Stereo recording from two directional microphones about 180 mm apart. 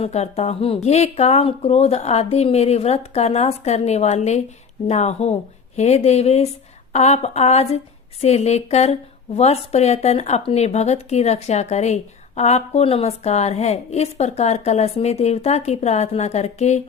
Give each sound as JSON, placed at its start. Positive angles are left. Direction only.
{"t": 0.0, "sound": "a woman's voice", "side_deg": 35}